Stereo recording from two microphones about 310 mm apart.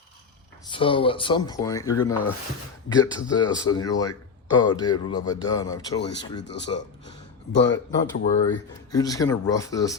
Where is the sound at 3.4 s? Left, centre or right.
Centre.